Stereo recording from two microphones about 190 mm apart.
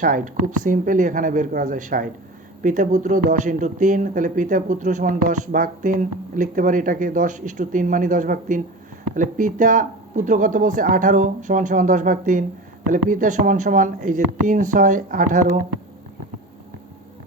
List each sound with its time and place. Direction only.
0.6 s speech: 45° right (ahead or behind)